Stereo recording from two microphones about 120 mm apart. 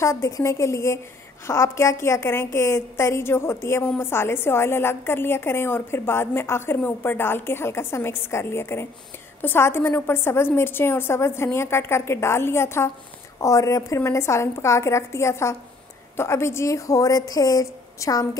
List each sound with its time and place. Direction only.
0.0 s a woman's voice: 25° left (ahead or behind)